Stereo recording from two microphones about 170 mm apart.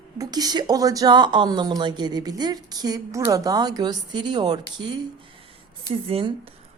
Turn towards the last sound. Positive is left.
turn(degrees=-35)  # may be behind; listen again after turning